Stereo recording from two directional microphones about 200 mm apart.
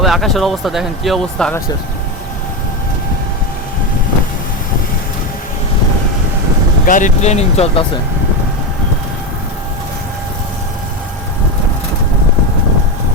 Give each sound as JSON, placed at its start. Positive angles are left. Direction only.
{"t": 0.0, "sound": "speech", "side_deg": 0}
{"t": 6.8, "sound": "speech", "side_deg": 40}